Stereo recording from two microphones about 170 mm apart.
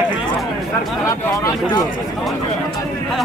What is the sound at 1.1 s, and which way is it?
Speech, 20° left (ahead or behind).